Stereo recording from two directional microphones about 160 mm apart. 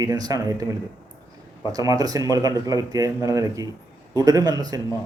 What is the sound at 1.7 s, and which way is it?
A man's voice, 20° right (ahead or behind).